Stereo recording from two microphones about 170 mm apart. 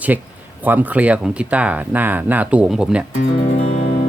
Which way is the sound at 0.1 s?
10° right (ahead or behind).